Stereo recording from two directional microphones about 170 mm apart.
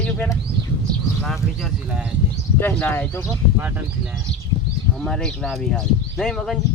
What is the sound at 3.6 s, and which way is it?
Speech, 10° right (ahead or behind).